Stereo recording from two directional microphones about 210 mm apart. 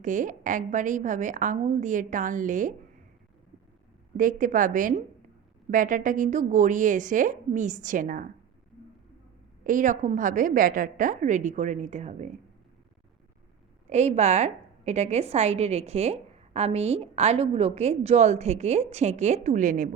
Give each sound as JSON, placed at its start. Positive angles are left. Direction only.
{"t": 0.0, "sound": "a woman's voice", "side_deg": -35}
{"t": 4.2, "sound": "a woman's voice", "side_deg": -40}
{"t": 9.6, "sound": "a woman's voice", "side_deg": -35}
{"t": 13.9, "sound": "a woman's voice", "side_deg": -30}